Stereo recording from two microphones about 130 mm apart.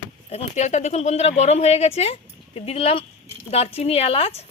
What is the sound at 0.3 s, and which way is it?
Speech, 55° left (ahead or behind).